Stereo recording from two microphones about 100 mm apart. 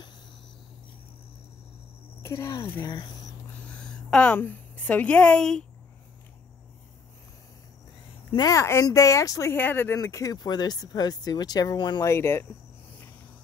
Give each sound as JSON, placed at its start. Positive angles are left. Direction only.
{"t": 2.2, "sound": "speech", "side_deg": 30}
{"t": 2.8, "sound": "speech", "side_deg": 45}
{"t": 3.6, "sound": "a woman's voice", "side_deg": 10}
{"t": 8.4, "sound": "speech", "side_deg": 35}
{"t": 9.5, "sound": "speech", "side_deg": 20}
{"t": 10.0, "sound": "speech", "side_deg": 35}
{"t": 12.0, "sound": "speech", "side_deg": 25}